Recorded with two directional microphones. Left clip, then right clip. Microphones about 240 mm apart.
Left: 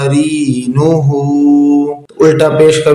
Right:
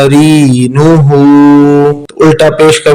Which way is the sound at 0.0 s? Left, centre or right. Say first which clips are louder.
Right 7 dB; right.